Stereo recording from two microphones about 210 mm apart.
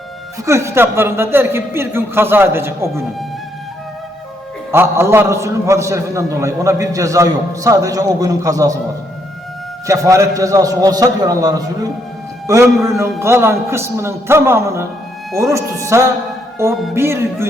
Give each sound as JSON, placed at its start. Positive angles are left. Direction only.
{"t": 0.4, "sound": "a man's voice", "side_deg": -15}
{"t": 4.7, "sound": "a man's voice", "side_deg": -10}
{"t": 9.8, "sound": "a man's voice", "side_deg": -15}